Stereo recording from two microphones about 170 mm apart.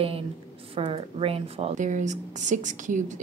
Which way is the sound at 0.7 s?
35° right (ahead or behind).